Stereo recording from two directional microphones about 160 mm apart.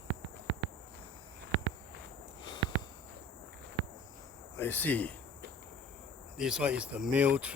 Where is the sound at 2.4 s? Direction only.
30° left (ahead or behind).